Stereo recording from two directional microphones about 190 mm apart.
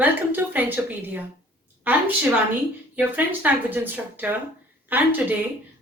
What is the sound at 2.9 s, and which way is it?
A woman's voice, 10° right (ahead or behind).